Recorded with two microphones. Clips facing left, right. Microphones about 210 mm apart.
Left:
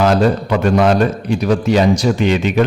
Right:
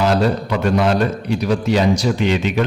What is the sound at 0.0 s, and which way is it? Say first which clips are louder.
A man's voice: left 3 dB; 50° left (ahead or behind).